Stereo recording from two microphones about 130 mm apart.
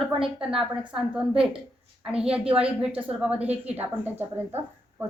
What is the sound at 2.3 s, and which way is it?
A woman's voice, 10° right (ahead or behind).